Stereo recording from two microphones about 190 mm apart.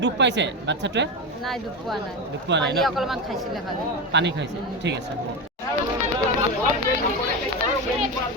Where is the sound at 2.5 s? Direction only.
65° right (ahead or behind).